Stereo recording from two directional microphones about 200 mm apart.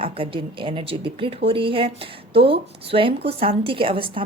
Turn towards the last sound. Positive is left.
turn(degrees=-25)  # may be behind; listen again after turning